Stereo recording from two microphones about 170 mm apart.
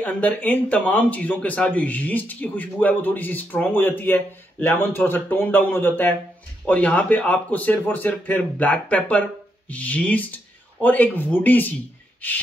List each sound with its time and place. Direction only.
0.0 s speech: 10° left (ahead or behind)